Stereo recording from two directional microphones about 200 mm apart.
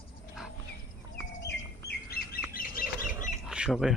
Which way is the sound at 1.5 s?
50° left (ahead or behind).